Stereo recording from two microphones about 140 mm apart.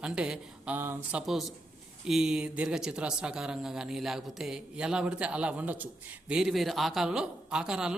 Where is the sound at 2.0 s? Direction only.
5° right (ahead or behind).